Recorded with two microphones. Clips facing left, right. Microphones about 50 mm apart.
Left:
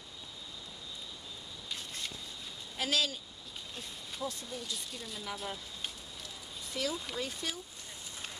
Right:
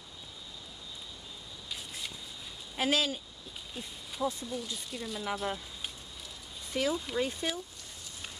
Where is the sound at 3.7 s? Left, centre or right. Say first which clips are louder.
Right 2 dB; centre.